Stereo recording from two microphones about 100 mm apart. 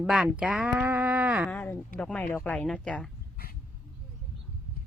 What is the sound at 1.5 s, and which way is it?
Speech, 15° left (ahead or behind).